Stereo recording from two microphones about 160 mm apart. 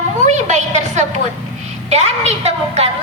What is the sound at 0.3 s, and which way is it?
A woman's voice, 45° right (ahead or behind).